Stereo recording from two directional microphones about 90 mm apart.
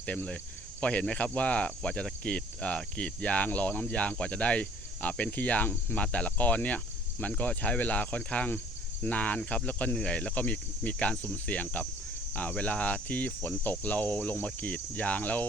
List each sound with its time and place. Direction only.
0.0 s cricket: 15° left (ahead or behind)